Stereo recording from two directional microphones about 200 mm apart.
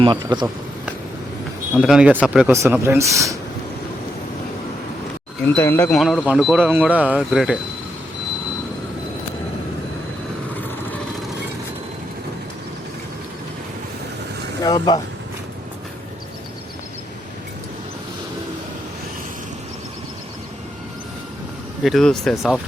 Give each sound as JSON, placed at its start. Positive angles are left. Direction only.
{"t": 0.0, "sound": "a man's voice", "side_deg": -25}
{"t": 1.7, "sound": "speech", "side_deg": 0}
{"t": 5.5, "sound": "speech", "side_deg": 10}
{"t": 6.0, "sound": "speech", "side_deg": 0}
{"t": 14.6, "sound": "speech", "side_deg": 20}
{"t": 21.8, "sound": "speech", "side_deg": 0}